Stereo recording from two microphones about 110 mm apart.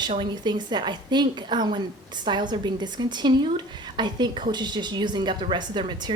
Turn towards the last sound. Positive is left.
turn(degrees=-45)  # may be behind; listen again after turning